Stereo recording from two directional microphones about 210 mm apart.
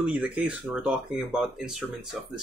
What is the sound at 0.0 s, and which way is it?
Speech, 5° right (ahead or behind).